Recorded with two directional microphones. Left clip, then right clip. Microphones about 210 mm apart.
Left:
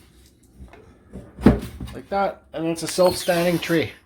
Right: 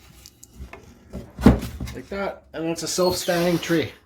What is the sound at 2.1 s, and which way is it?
Speech, centre (ahead or behind).